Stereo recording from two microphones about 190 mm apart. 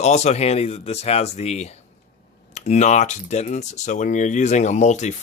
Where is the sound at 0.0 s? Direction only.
35° left (ahead or behind).